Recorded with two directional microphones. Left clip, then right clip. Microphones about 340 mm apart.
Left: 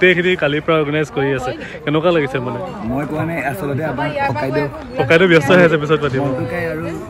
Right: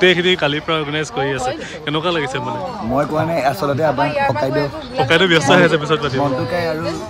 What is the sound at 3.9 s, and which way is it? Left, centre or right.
Speech, right.